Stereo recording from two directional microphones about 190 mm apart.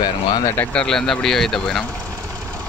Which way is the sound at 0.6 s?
5° left (ahead or behind).